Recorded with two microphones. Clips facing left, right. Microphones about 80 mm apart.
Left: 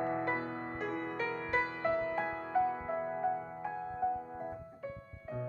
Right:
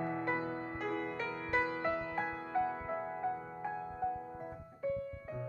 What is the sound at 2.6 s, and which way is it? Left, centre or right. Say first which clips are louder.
Music: left 3 dB; centre.